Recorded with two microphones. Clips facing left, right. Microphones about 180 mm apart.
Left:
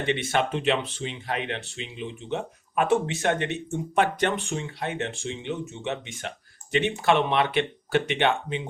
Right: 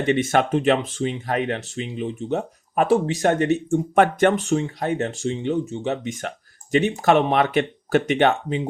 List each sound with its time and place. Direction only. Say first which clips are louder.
0.0 s speech: right 6 dB; 45° right (ahead or behind)